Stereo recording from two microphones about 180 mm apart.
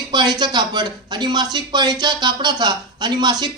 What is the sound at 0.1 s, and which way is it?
A woman's voice, 25° right (ahead or behind).